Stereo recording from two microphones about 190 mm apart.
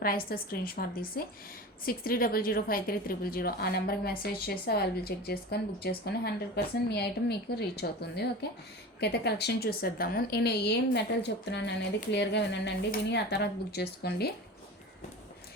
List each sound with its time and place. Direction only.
0.3 s a woman's voice: 50° left (ahead or behind)